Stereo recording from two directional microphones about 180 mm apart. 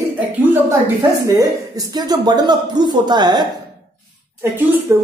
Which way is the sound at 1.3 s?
20° right (ahead or behind).